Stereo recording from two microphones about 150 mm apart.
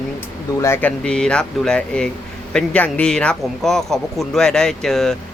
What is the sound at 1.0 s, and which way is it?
Speech, 5° left (ahead or behind).